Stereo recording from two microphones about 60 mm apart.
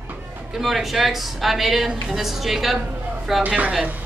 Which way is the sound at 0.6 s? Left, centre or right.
Centre.